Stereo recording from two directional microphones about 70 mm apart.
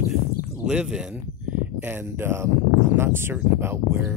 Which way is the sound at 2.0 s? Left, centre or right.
Right.